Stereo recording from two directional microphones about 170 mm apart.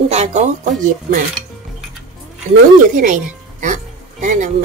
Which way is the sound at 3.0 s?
50° right (ahead or behind).